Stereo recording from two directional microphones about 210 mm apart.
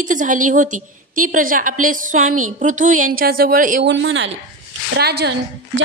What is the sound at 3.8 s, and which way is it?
Speech, 60° right (ahead or behind).